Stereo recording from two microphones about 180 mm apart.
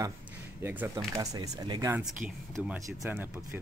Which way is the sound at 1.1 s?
20° right (ahead or behind).